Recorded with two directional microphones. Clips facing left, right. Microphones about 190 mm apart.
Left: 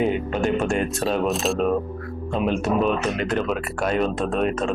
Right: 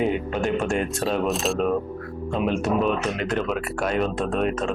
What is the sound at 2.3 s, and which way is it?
Speech, 35° left (ahead or behind).